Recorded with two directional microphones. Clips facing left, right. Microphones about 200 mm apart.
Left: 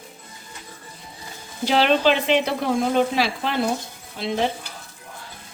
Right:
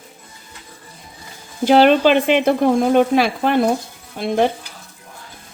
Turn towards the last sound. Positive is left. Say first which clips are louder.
# right 6 dB
turn(degrees=-55)  # may be behind; listen again after turning